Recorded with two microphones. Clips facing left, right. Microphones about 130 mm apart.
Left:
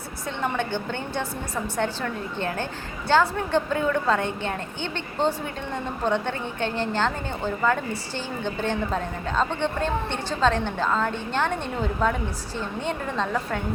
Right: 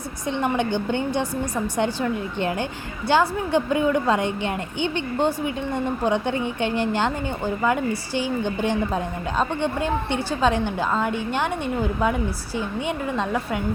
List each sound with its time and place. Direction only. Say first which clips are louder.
0.3 s a woman's voice: right 4 dB; 15° right (ahead or behind)